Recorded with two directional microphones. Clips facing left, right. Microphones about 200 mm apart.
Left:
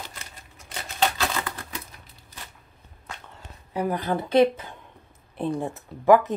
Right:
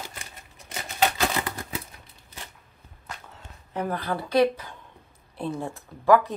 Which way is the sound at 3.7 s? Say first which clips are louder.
Left 3 dB; 15° left (ahead or behind).